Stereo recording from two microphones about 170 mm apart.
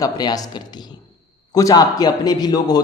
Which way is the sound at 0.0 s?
20° left (ahead or behind).